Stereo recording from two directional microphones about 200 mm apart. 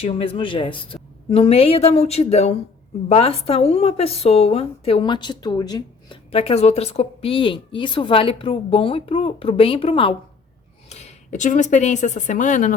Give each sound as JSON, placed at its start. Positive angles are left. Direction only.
{"t": 0.0, "sound": "a woman's voice", "side_deg": 30}